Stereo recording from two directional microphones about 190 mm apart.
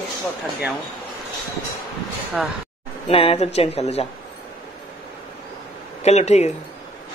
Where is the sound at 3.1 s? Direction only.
30° left (ahead or behind).